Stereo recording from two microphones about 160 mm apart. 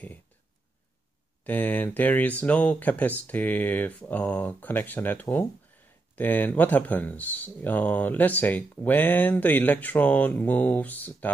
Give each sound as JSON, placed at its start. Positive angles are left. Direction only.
{"t": 1.4, "sound": "speech", "side_deg": 10}